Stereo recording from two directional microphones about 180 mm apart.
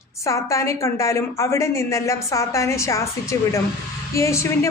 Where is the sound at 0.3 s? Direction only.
15° left (ahead or behind).